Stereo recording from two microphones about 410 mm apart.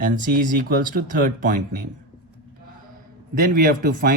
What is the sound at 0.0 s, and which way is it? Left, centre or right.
Speech, right.